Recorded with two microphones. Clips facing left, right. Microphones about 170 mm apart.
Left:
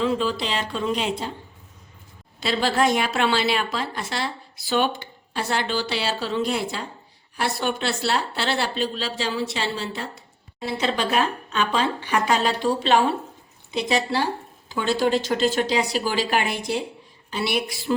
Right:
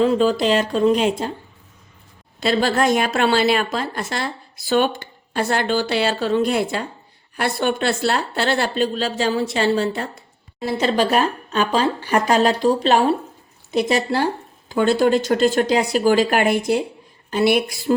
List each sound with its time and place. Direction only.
0.0 s speech: 45° right (ahead or behind)
2.4 s speech: 45° right (ahead or behind)